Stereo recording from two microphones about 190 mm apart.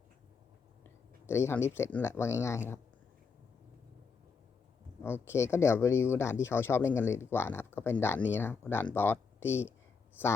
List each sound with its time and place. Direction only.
1.3 s speech: 15° left (ahead or behind)
5.0 s speech: 10° left (ahead or behind)